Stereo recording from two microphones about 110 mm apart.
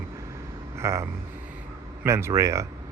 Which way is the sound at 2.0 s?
25° right (ahead or behind).